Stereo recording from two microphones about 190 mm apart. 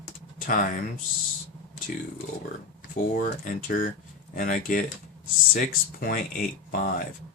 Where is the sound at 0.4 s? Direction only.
50° left (ahead or behind).